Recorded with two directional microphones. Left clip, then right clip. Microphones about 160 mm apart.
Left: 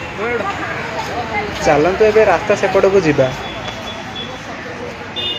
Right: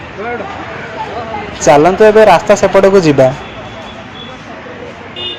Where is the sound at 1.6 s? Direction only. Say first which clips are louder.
Right 7 dB; 45° right (ahead or behind).